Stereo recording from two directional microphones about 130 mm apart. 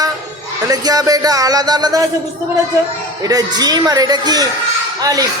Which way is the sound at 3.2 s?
30° right (ahead or behind).